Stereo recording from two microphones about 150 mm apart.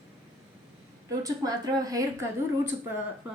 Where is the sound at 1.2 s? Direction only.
25° right (ahead or behind).